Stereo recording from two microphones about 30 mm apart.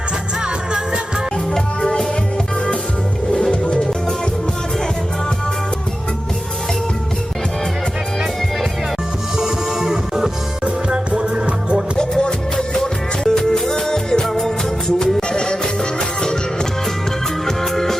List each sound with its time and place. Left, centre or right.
3.3 s music: left
9.4 s music: centre
10.8 s music: right
11.9 s music: left
12.5 s music: centre
15.3 s music: left
17.4 s music: centre